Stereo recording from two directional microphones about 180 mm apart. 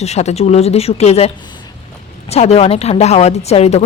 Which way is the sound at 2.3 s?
35° left (ahead or behind).